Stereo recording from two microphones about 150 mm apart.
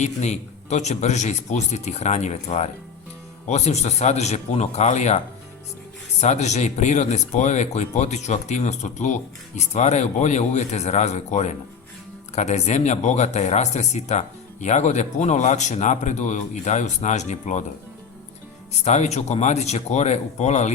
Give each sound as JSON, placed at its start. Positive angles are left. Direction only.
{"t": 0.0, "sound": "speech", "side_deg": 50}
{"t": 18.9, "sound": "speech", "side_deg": 50}